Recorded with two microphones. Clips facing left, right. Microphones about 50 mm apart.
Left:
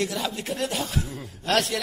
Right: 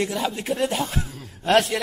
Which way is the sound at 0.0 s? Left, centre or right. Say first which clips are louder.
Right 3 dB; right.